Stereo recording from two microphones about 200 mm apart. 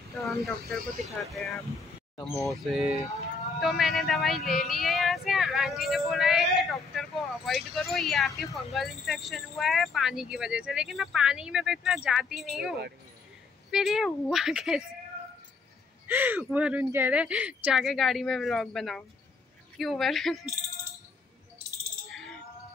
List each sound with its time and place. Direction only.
0.2 s speech: centre (ahead or behind)
3.5 s music: centre (ahead or behind)
8.5 s speech: centre (ahead or behind)
16.1 s speech: 10° right (ahead or behind)